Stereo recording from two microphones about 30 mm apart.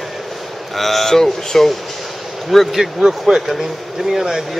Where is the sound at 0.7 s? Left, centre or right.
Centre.